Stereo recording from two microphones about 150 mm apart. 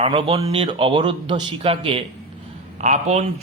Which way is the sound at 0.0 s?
35° right (ahead or behind).